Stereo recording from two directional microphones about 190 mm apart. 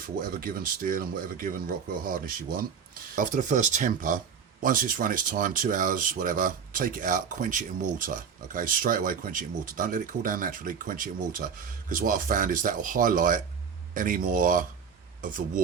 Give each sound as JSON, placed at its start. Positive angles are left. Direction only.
{"t": 0.0, "sound": "speech", "side_deg": -50}